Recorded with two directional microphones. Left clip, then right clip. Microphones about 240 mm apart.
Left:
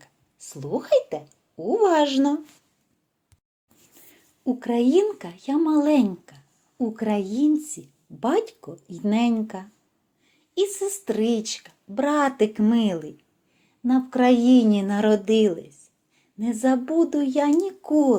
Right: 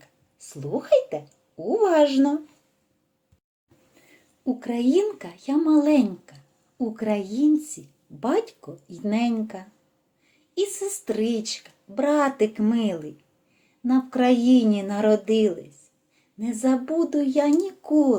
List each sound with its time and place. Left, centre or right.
0.0 s speech: left
4.4 s speech: left